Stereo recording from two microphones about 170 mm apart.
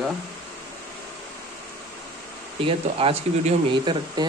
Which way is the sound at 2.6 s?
30° right (ahead or behind).